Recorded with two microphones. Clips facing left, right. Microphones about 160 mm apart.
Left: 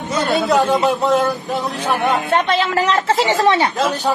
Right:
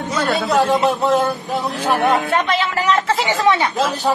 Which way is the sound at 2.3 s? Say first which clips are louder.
Left 2 dB; 30° left (ahead or behind).